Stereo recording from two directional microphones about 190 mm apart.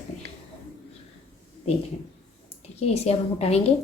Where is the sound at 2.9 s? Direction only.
35° left (ahead or behind).